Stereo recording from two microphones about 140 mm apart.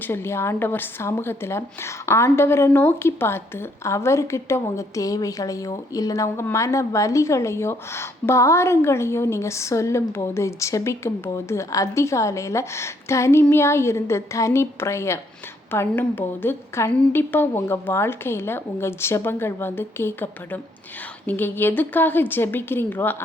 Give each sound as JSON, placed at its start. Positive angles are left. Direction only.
{"t": 0.0, "sound": "a woman's voice", "side_deg": 15}